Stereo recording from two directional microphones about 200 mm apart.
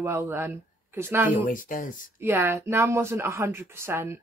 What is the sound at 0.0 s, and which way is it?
Speech, 10° right (ahead or behind).